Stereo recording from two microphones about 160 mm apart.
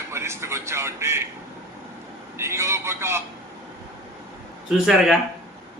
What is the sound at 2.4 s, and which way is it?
Speech, 15° right (ahead or behind).